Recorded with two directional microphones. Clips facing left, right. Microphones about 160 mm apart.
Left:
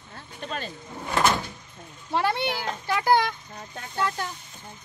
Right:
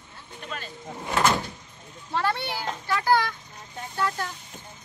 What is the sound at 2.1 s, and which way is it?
A child's voice, 15° left (ahead or behind).